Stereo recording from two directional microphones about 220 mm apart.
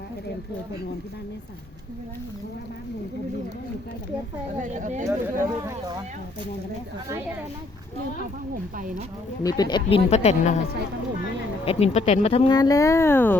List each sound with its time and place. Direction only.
4.6 s speech: 35° right (ahead or behind)
5.0 s speech: 15° right (ahead or behind)
8.8 s speech: 35° right (ahead or behind)
9.4 s speech: 15° left (ahead or behind)
11.6 s speech: 25° left (ahead or behind); by 13.3 s 10° left (ahead or behind)